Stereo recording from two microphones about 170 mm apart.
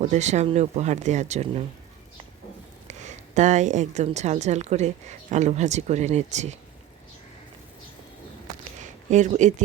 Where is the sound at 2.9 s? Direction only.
45° right (ahead or behind).